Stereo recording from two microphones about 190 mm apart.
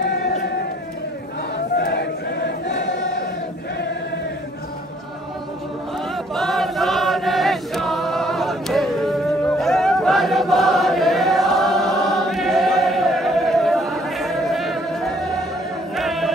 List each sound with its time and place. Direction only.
1.8 s crowd: 60° left (ahead or behind)
6.3 s choir: centre (ahead or behind)
16.0 s a sound: centre (ahead or behind)